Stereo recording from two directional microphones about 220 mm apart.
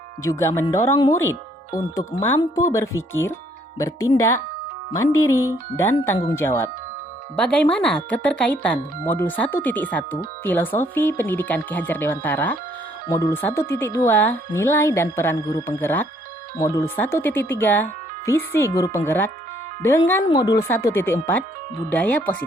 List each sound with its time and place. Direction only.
0.2 s speech: 15° left (ahead or behind)
4.9 s speech: 15° left (ahead or behind)